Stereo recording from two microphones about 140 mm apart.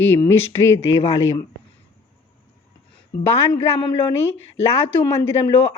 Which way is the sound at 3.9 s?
35° left (ahead or behind).